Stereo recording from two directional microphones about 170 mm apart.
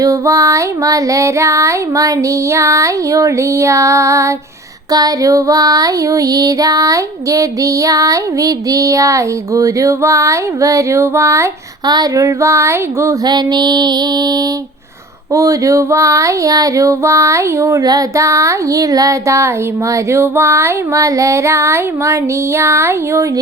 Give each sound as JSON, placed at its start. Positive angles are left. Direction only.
{"t": 0.0, "sound": "music", "side_deg": -20}
{"t": 4.9, "sound": "child singing", "side_deg": -20}
{"t": 15.3, "sound": "music", "side_deg": -20}